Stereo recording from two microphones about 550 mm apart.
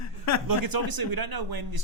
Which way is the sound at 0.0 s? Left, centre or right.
Left.